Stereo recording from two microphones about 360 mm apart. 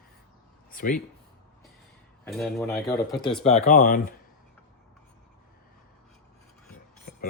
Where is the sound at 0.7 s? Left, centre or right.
Left.